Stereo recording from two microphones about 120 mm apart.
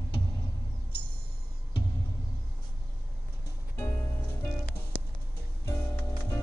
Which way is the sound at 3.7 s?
25° left (ahead or behind).